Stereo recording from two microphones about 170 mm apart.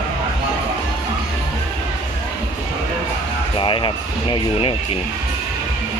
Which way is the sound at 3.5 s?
30° left (ahead or behind).